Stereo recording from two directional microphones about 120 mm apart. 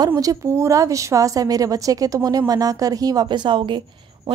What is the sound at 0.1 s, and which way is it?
A woman's voice, 30° right (ahead or behind).